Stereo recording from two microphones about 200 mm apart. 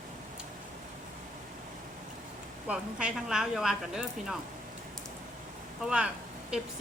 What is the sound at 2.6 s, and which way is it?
Speech, 5° right (ahead or behind).